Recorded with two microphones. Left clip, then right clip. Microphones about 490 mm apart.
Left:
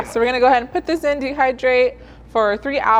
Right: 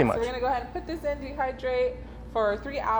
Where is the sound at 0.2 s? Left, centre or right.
Left.